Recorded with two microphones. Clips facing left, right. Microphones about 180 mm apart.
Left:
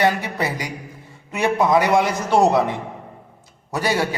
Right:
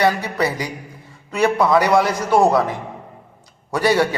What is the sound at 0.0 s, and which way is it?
A man's voice, 15° left (ahead or behind).